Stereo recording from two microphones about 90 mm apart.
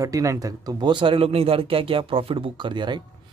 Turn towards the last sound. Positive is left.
turn(degrees=-55)  # may be behind; listen again after turning